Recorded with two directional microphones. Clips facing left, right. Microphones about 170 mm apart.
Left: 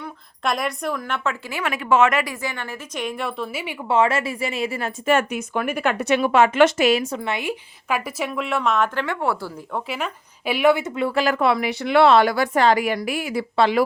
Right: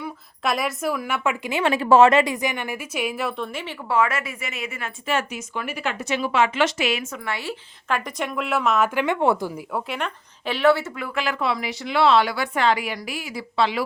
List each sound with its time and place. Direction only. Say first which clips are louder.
0.0 s a woman's voice: even; 5° right (ahead or behind)
3.8 s speech: left 3 dB; 25° left (ahead or behind)
5.0 s speech: left 6 dB; 55° left (ahead or behind); by 7.3 s 35° left (ahead or behind)
7.3 s a woman's voice: left 4 dB; 15° left (ahead or behind); by 8.9 s centre (ahead or behind)
9.0 s a woman's voice: right 3 dB; 20° right (ahead or behind)
9.7 s speech: left 4 dB; centre (ahead or behind); by 11.1 s 20° left (ahead or behind)
11.1 s speech: left 4 dB; 40° left (ahead or behind)
11.3 s a woman's voice: left 5 dB; 55° left (ahead or behind)